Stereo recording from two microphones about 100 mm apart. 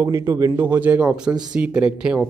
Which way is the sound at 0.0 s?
35° right (ahead or behind).